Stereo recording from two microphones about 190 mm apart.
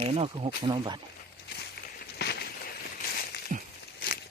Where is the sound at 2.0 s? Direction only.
60° left (ahead or behind).